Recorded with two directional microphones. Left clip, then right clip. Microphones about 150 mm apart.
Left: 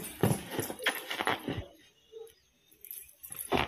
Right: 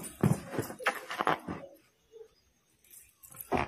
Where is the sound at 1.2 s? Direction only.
25° right (ahead or behind).